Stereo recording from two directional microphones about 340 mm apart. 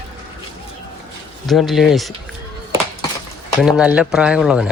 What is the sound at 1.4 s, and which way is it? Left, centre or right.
Speech, centre.